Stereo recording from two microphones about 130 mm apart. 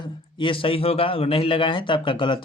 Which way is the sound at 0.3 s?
40° left (ahead or behind).